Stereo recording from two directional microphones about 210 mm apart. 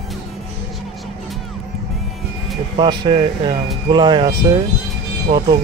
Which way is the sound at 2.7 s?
20° right (ahead or behind).